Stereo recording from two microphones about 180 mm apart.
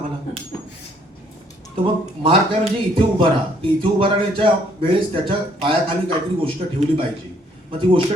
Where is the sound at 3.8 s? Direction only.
30° right (ahead or behind).